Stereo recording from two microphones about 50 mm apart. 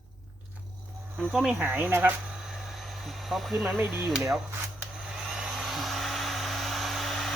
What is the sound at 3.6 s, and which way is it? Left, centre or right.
Speech, right.